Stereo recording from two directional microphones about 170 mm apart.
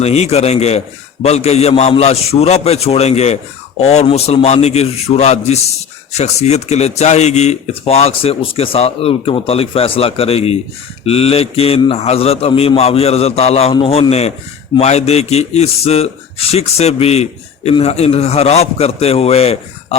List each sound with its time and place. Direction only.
0.0 s speech: 40° left (ahead or behind)